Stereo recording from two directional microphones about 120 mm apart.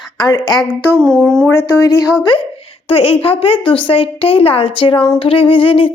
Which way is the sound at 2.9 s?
55° left (ahead or behind).